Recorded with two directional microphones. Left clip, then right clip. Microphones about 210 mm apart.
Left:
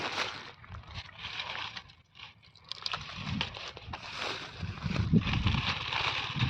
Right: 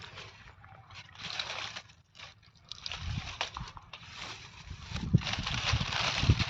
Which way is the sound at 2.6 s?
55° left (ahead or behind).